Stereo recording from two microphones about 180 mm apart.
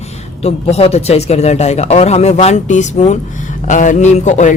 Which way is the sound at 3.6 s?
45° left (ahead or behind).